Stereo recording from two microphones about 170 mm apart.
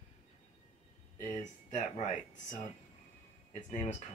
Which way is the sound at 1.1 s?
45° left (ahead or behind).